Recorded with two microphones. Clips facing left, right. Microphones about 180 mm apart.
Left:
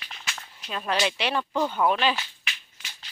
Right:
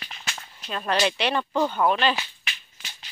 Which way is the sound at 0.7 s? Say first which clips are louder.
Right 2 dB; 5° left (ahead or behind).